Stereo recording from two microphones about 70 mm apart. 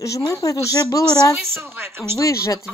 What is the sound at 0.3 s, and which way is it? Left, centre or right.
Speech, left.